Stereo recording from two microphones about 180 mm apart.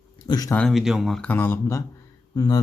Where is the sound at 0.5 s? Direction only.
5° left (ahead or behind).